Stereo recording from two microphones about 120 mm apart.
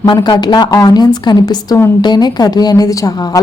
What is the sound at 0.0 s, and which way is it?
A woman's voice, 35° left (ahead or behind).